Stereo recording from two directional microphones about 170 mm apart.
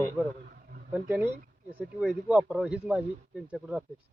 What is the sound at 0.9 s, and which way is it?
Speech, 10° right (ahead or behind).